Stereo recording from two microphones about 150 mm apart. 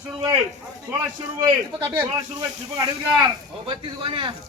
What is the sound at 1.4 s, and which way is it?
Speech, 25° right (ahead or behind).